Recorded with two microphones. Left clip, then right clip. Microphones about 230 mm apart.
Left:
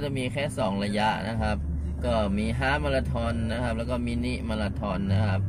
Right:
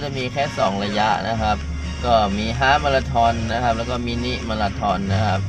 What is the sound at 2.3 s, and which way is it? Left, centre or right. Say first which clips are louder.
Speech: right 10 dB; right.